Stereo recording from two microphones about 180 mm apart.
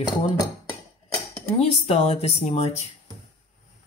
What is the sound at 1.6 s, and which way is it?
Speech, 35° left (ahead or behind).